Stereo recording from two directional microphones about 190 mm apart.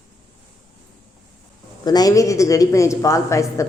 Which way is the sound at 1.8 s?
20° left (ahead or behind).